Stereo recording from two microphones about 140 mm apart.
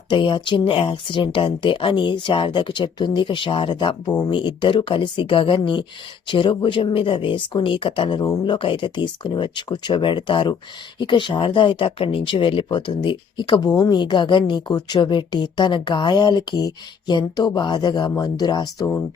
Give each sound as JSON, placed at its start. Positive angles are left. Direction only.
{"t": 0.1, "sound": "speech", "side_deg": 35}
{"t": 13.7, "sound": "speech", "side_deg": 20}
{"t": 14.0, "sound": "speech", "side_deg": 35}